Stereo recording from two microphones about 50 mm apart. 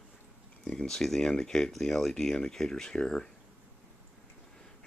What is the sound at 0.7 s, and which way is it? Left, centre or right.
Speech, centre.